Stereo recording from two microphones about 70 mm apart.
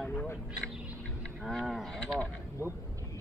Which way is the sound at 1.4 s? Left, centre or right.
Centre.